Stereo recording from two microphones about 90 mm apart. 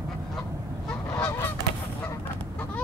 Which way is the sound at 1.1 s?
25° left (ahead or behind).